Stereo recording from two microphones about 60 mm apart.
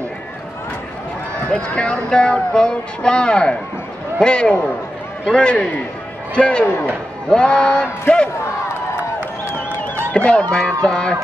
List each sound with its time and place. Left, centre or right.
1.5 s speech: centre
10.1 s speech: centre